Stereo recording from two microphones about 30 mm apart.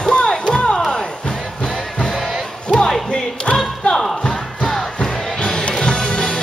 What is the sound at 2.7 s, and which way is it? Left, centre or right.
Music, centre.